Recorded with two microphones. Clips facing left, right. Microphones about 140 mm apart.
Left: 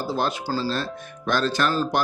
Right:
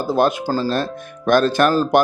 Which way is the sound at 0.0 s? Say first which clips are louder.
Right 8 dB; 50° right (ahead or behind).